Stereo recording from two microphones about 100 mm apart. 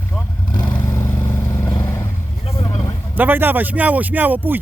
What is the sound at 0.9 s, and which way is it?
Vehicle, 25° left (ahead or behind).